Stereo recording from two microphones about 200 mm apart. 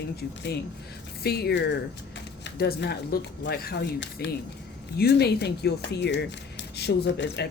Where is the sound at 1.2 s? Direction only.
50° left (ahead or behind).